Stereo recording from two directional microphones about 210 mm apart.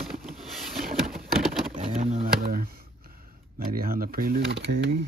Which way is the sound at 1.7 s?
35° right (ahead or behind).